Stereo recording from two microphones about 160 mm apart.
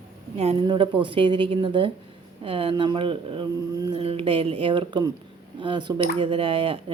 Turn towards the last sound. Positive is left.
turn(degrees=-35)  # may be behind; listen again after turning